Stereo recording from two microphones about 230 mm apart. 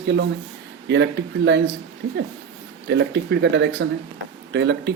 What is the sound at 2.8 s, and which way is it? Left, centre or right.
Speech, right.